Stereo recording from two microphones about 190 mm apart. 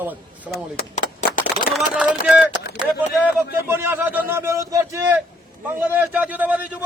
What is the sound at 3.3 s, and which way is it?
A man's voice, 10° right (ahead or behind).